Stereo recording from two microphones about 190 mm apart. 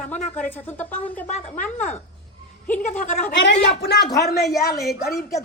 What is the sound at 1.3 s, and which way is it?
Speech, 35° left (ahead or behind).